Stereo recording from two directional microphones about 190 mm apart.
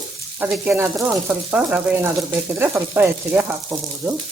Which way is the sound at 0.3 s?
5° right (ahead or behind).